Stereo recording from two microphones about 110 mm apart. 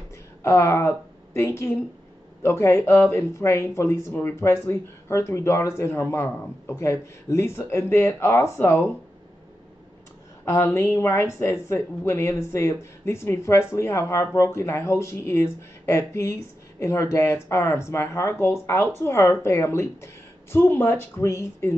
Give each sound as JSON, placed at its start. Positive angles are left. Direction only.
{"t": 0.4, "sound": "speech", "side_deg": 25}
{"t": 10.4, "sound": "speech", "side_deg": 25}